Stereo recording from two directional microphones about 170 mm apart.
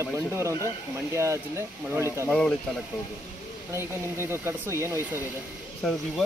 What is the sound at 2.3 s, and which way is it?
Speech, 5° left (ahead or behind).